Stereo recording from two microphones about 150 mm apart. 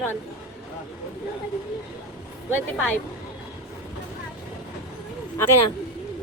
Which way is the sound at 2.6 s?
10° left (ahead or behind).